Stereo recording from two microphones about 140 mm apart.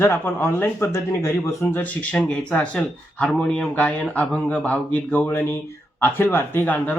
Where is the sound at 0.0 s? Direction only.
15° left (ahead or behind).